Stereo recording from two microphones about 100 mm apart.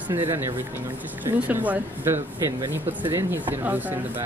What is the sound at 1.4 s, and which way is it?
Speech, 15° right (ahead or behind).